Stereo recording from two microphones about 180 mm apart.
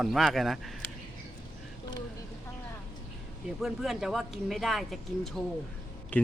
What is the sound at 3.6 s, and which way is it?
Speech, centre (ahead or behind).